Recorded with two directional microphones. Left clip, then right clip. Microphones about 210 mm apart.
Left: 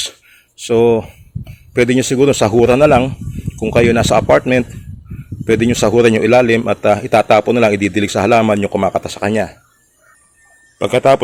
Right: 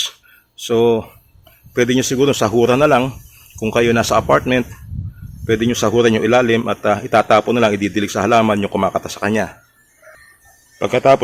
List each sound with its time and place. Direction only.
0.0 s a sound: 20° left (ahead or behind)
1.7 s a man's voice: 15° left (ahead or behind)
10.8 s speech: 15° left (ahead or behind)